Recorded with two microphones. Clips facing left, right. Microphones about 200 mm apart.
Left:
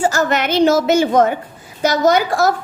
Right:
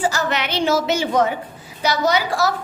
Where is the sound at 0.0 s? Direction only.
45° left (ahead or behind).